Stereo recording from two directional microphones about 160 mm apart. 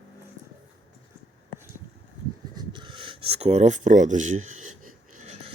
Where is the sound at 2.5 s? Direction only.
25° right (ahead or behind); by 5.5 s 45° right (ahead or behind).